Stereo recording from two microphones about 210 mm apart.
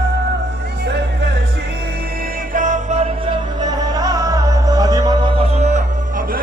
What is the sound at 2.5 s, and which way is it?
Music, 35° right (ahead or behind).